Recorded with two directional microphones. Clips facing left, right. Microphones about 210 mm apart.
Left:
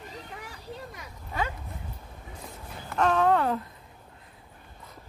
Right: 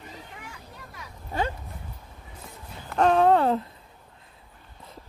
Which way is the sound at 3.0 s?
30° right (ahead or behind).